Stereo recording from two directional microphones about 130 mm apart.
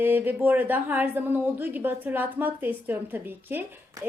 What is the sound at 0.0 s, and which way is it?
A woman's voice, 15° right (ahead or behind).